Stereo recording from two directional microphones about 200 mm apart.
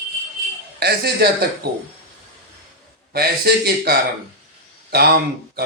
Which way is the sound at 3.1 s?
50° right (ahead or behind).